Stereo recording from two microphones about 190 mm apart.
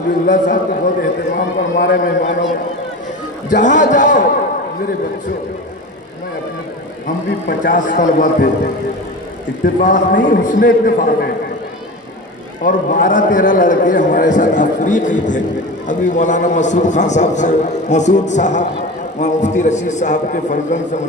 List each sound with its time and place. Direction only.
0.3 s a man's voice: 45° left (ahead or behind)
1.7 s a man's voice: 70° left (ahead or behind)
3.5 s a man's voice: 40° left (ahead or behind)
7.3 s a man's voice: 60° left (ahead or behind)
7.9 s a man's voice: 45° left (ahead or behind)
12.6 s a man's voice: 45° left (ahead or behind)